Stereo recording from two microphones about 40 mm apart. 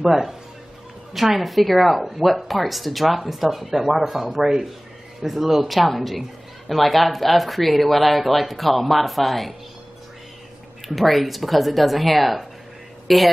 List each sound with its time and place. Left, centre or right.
0.0 s speech: centre
11.0 s speech: centre